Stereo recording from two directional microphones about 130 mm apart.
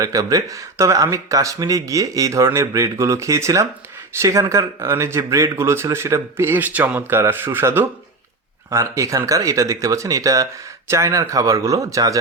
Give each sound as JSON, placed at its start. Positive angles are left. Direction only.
{"t": 0.0, "sound": "speech", "side_deg": -25}